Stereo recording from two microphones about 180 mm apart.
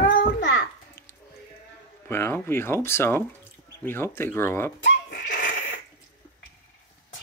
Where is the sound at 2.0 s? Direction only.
10° left (ahead or behind).